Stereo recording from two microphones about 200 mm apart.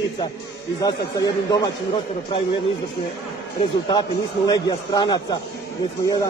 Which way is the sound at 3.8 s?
20° left (ahead or behind).